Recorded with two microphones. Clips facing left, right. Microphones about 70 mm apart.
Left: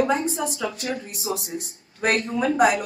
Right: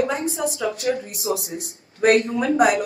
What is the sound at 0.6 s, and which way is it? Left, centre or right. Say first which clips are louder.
Speech: right 5 dB; right.